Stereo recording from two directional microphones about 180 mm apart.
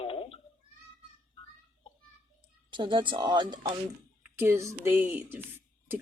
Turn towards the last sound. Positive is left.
turn(degrees=-10)  # may be behind; listen again after turning